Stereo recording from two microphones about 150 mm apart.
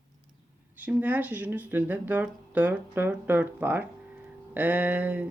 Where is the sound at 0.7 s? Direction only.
10° right (ahead or behind).